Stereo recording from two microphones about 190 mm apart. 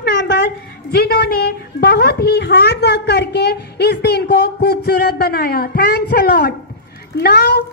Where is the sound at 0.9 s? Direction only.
55° left (ahead or behind).